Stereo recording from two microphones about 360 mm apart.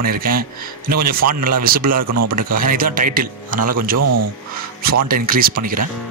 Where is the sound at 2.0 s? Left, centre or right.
Right.